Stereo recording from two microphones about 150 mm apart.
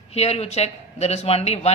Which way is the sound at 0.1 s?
45° left (ahead or behind).